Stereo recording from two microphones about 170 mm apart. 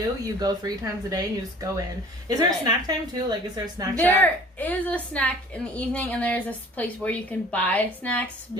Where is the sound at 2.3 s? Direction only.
20° right (ahead or behind).